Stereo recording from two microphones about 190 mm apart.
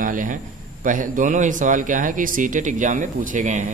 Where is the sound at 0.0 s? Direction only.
45° right (ahead or behind).